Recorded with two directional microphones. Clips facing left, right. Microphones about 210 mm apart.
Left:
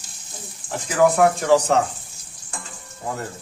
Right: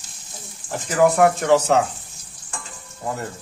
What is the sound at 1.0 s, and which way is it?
Speech, centre (ahead or behind).